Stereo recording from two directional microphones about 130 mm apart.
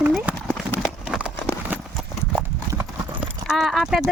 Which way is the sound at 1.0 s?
5° right (ahead or behind).